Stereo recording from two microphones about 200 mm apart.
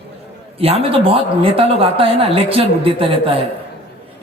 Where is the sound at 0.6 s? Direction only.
30° right (ahead or behind).